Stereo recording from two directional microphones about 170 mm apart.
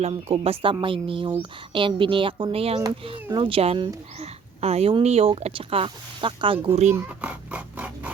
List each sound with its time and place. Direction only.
0.0 s speech: 35° right (ahead or behind)
6.9 s speech: 10° right (ahead or behind)